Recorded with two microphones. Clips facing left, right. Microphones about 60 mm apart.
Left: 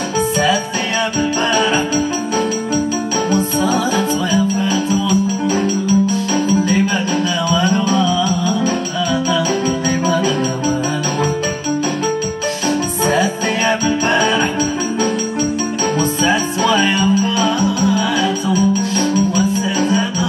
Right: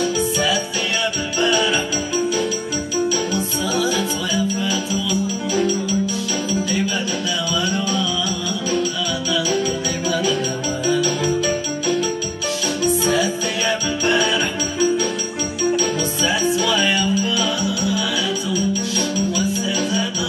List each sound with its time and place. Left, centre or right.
1.4 s music: left
3.3 s music: left
10.0 s music: left
13.0 s music: left
16.0 s music: left